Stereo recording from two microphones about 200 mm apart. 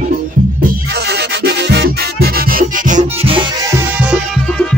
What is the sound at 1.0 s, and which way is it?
Music, 55° right (ahead or behind).